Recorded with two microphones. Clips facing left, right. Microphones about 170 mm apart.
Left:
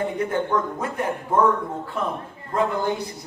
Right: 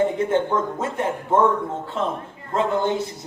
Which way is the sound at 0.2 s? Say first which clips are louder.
Right 2 dB; 25° right (ahead or behind).